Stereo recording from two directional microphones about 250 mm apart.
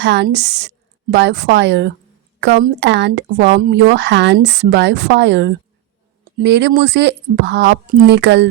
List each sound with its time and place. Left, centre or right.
0.0 s a woman's voice: right